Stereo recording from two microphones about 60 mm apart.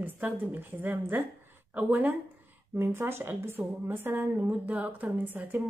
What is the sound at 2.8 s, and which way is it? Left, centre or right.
A woman's voice, right.